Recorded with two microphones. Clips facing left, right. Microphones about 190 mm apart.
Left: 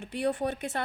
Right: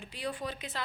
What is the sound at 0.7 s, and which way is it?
Speech, 55° left (ahead or behind).